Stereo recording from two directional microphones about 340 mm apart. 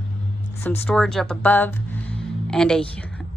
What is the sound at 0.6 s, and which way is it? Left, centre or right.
A woman's voice, centre.